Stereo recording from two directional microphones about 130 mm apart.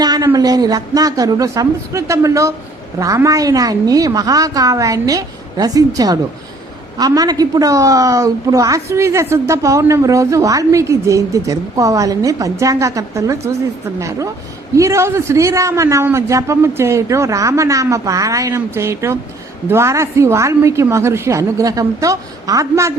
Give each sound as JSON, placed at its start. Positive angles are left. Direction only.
{"t": 0.0, "sound": "a sound", "side_deg": -30}
{"t": 0.3, "sound": "a woman's voice", "side_deg": -30}
{"t": 14.8, "sound": "a woman's voice", "side_deg": -20}